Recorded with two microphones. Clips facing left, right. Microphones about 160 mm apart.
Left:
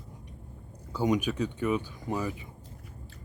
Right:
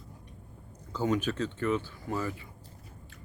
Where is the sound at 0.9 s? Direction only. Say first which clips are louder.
Left 2 dB; 15° left (ahead or behind).